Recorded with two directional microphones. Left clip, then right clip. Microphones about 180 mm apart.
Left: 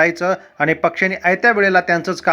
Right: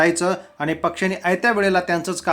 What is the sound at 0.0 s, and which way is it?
Speech, 20° left (ahead or behind).